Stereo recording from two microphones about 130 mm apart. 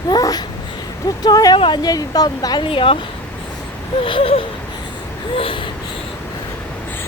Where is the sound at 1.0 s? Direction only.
30° left (ahead or behind).